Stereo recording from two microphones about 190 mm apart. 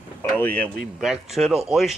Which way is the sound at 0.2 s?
10° left (ahead or behind).